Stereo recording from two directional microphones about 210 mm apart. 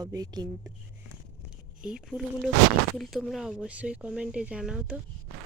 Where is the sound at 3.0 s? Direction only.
Centre (ahead or behind).